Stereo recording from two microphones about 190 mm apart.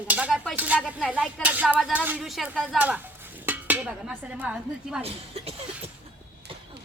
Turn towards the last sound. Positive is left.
turn(degrees=-30)  # may be behind; listen again after turning